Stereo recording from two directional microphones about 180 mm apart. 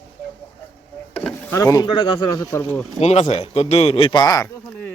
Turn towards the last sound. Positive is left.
turn(degrees=20)  # may be behind; listen again after turning